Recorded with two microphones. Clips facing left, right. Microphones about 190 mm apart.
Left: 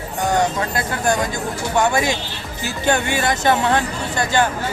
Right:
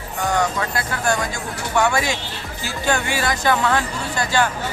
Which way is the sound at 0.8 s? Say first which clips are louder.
Left 3 dB; 20° left (ahead or behind).